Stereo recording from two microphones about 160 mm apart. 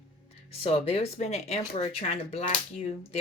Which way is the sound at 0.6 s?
40° left (ahead or behind).